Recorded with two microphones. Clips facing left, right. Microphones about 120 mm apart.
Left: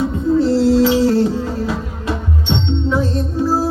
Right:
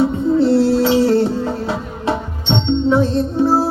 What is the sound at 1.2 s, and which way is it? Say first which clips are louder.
Music: even; 30° right (ahead or behind).